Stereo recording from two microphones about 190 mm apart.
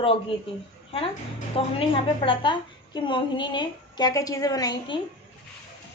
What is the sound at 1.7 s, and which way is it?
A woman's voice, 25° left (ahead or behind).